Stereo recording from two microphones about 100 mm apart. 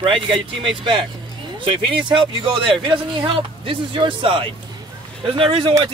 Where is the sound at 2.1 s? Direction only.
60° right (ahead or behind).